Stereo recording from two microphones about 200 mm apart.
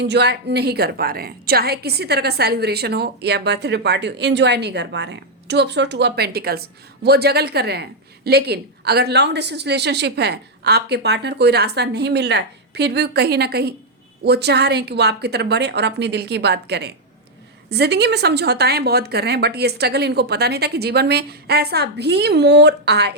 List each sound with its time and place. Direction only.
0.0 s a woman's voice: 55° right (ahead or behind)